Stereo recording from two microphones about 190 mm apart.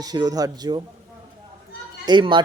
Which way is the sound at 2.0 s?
25° right (ahead or behind).